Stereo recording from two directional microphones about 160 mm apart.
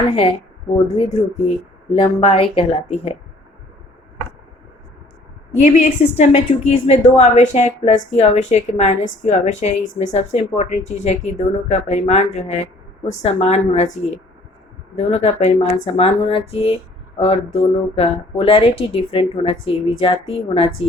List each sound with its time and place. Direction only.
0.1 s a woman's voice: 35° left (ahead or behind)
2.2 s a woman's voice: 35° left (ahead or behind)
5.6 s a woman's voice: 45° left (ahead or behind)